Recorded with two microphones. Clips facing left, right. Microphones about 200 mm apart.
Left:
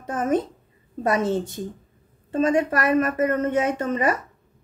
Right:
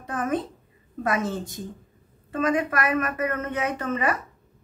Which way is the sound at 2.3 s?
30° left (ahead or behind).